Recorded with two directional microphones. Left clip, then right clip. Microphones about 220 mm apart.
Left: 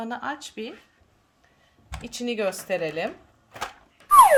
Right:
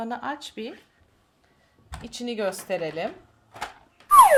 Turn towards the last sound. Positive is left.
turn(degrees=0)  # may be behind; listen again after turning